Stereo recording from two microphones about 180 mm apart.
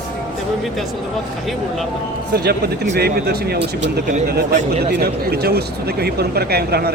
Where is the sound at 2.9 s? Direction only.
60° right (ahead or behind).